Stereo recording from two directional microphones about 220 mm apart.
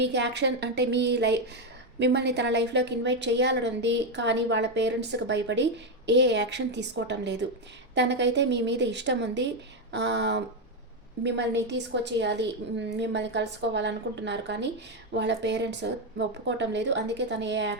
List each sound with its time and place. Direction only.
0.0 s a woman's voice: 50° right (ahead or behind)